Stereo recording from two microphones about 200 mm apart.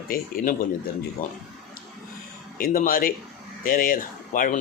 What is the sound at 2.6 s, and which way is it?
Speech, 45° left (ahead or behind).